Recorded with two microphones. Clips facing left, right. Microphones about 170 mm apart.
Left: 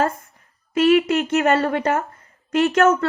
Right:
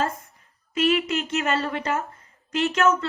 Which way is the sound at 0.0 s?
60° left (ahead or behind).